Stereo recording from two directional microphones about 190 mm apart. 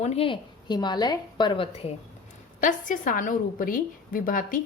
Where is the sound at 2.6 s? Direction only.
45° left (ahead or behind).